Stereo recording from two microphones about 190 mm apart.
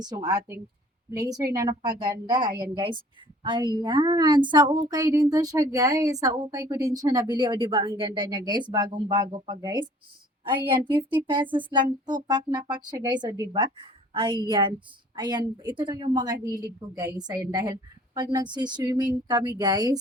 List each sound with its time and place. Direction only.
0.0 s a woman's voice: 20° right (ahead or behind)